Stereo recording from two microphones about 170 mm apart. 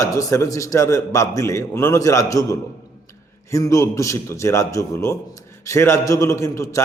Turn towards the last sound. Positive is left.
turn(degrees=15)  # may be behind; listen again after turning